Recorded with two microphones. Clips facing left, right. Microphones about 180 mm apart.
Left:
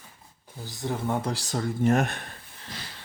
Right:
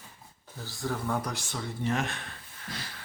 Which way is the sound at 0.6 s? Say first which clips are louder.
Left 3 dB; 20° left (ahead or behind).